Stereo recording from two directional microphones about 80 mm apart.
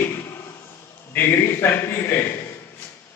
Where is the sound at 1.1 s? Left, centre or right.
Left.